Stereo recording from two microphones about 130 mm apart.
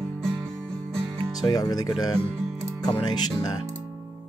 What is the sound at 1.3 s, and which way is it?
Speech, 30° left (ahead or behind).